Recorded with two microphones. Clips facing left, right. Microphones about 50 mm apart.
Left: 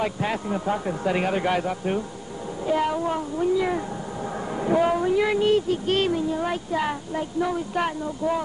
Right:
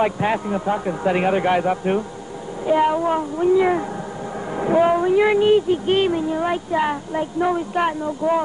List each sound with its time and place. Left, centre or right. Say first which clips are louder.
0.0 s a man's voice: right 6 dB; right